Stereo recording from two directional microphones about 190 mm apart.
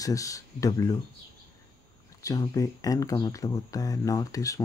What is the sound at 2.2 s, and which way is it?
Speech, 20° left (ahead or behind).